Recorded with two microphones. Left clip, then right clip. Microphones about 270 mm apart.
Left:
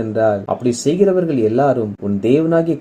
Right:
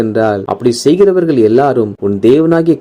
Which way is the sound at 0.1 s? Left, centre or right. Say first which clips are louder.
Right 3 dB; right.